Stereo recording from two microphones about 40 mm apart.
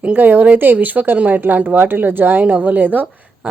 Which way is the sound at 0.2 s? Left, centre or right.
Right.